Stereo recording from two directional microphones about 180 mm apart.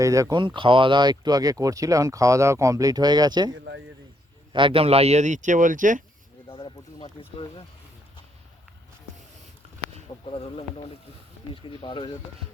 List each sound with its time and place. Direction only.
0.0 s speech: 20° right (ahead or behind)
3.5 s a man's voice: 90° right
4.5 s speech: 30° right (ahead or behind); by 6.0 s 45° right (ahead or behind)
6.5 s speech: 30° left (ahead or behind)
10.3 s speech: 30° left (ahead or behind)